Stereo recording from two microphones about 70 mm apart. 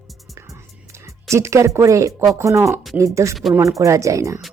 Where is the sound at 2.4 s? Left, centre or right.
Right.